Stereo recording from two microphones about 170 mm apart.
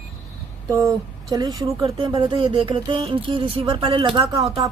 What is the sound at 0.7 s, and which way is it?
Speech, 20° right (ahead or behind).